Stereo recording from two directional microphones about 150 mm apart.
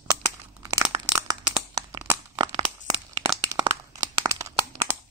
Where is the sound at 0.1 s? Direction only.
20° right (ahead or behind).